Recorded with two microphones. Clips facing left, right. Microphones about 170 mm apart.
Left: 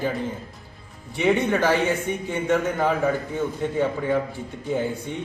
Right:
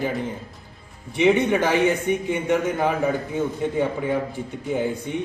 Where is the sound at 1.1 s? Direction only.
15° right (ahead or behind).